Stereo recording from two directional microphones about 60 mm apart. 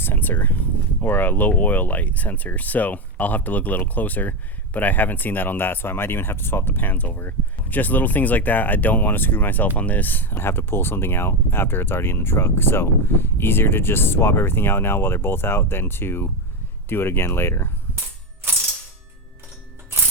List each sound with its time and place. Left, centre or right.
0.0 s speech: left